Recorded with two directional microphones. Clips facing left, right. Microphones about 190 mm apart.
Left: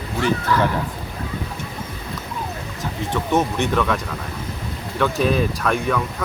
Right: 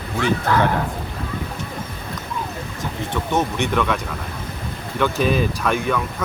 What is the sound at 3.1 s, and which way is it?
Speech, centre (ahead or behind).